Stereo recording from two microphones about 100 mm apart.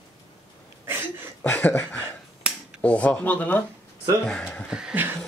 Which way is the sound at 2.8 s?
15° left (ahead or behind).